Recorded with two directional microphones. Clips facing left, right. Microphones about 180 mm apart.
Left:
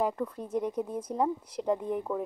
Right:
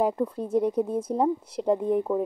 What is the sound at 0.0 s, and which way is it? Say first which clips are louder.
A woman's voice: right 5 dB; 25° right (ahead or behind).